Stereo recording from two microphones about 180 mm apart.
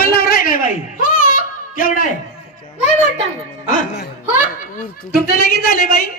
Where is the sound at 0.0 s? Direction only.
55° left (ahead or behind).